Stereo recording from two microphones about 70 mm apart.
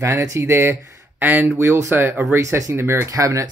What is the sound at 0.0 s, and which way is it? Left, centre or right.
Speech, right.